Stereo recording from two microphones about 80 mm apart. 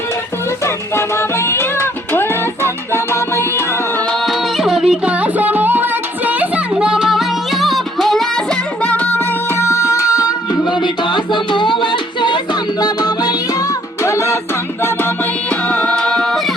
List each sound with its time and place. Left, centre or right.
0.6 s music: left
4.3 s music: centre
5.2 s music: right; by 8.3 s centre
8.8 s music: centre
9.6 s music: left
10.7 s music: left
12.8 s music: left
14.0 s music: left
15.7 s music: centre